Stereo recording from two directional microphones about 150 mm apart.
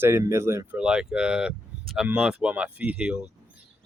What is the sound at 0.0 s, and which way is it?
Speech, 15° right (ahead or behind).